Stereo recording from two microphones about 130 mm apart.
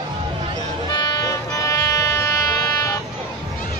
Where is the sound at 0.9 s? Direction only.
30° left (ahead or behind).